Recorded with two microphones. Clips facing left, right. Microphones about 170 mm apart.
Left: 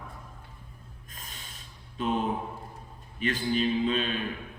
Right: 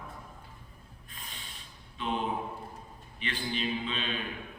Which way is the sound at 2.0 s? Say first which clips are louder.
Left 4 dB; 45° left (ahead or behind).